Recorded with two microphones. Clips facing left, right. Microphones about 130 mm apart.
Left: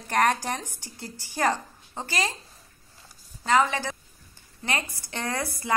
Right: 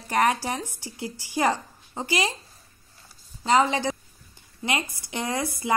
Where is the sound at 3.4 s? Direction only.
20° right (ahead or behind).